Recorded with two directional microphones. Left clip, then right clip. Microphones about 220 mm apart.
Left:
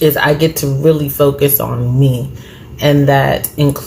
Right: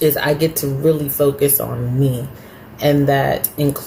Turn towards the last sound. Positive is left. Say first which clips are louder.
# left 4 dB
turn(degrees=5)  # may be behind; listen again after turning